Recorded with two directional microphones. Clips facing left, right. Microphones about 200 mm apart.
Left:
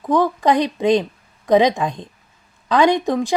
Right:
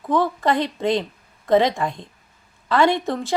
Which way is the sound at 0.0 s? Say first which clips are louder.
Left 3 dB; 15° left (ahead or behind).